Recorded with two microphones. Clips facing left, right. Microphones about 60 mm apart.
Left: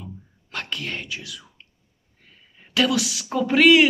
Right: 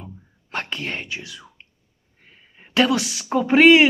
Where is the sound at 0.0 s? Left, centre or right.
Right.